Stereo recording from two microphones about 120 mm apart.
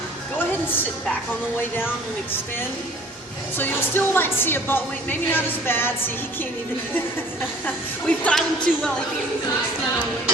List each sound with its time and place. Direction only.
3.6 s speech: 20° left (ahead or behind)
8.0 s speech: 10° left (ahead or behind)